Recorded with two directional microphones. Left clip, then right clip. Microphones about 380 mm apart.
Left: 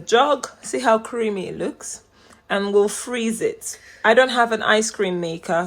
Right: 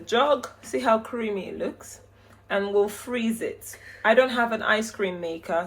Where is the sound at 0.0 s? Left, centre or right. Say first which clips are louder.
Left 5 dB; left.